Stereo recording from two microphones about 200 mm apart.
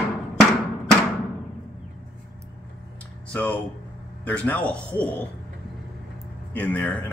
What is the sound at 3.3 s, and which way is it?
Speech, 5° left (ahead or behind).